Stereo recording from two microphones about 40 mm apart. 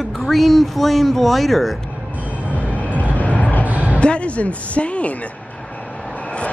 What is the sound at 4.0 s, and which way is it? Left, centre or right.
Speech, left.